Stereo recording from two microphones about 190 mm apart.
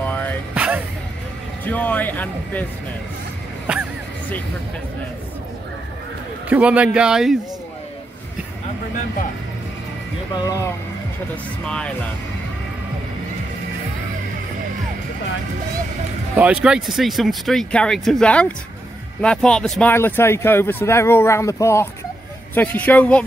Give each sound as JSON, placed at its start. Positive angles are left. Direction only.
{"t": 0.1, "sound": "music", "side_deg": 10}
{"t": 0.6, "sound": "music", "side_deg": -5}
{"t": 1.6, "sound": "speech", "side_deg": 10}
{"t": 3.7, "sound": "speech", "side_deg": -5}
{"t": 6.5, "sound": "speech", "side_deg": -5}
{"t": 10.3, "sound": "speech", "side_deg": 20}
{"t": 11.6, "sound": "speech", "side_deg": 5}
{"t": 16.3, "sound": "speech", "side_deg": -5}